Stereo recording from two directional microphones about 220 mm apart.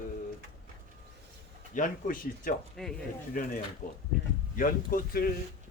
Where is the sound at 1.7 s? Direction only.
40° left (ahead or behind).